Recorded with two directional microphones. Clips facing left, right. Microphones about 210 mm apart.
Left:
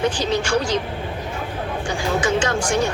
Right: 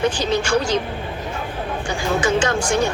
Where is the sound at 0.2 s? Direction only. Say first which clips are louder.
Right 1 dB; 55° right (ahead or behind).